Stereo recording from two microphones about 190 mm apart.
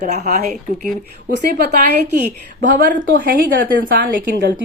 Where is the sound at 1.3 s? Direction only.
55° right (ahead or behind).